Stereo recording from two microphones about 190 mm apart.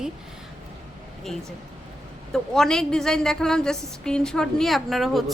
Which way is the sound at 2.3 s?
5° left (ahead or behind).